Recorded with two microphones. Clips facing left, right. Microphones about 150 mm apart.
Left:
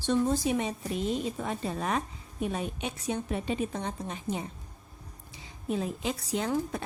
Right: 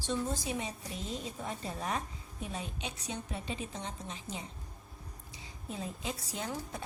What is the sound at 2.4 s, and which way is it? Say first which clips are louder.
A woman's voice: left 8 dB; 60° left (ahead or behind).